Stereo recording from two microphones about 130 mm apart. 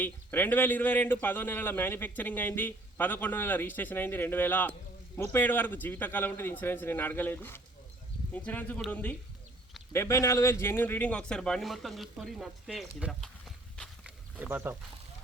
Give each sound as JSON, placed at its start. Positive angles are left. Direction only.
{"t": 0.0, "sound": "a man's voice", "side_deg": 15}
{"t": 13.7, "sound": "wild animals", "side_deg": 5}
{"t": 14.3, "sound": "speech", "side_deg": -10}